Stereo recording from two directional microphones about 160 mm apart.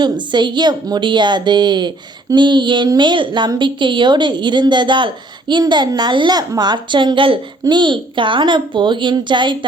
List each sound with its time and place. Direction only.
0.0 s a woman's voice: 30° right (ahead or behind)